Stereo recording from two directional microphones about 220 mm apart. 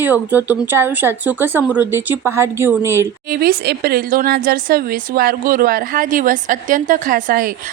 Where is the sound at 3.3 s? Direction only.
45° right (ahead or behind).